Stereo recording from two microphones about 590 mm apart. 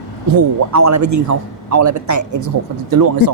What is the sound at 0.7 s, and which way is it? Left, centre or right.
A man's voice, right.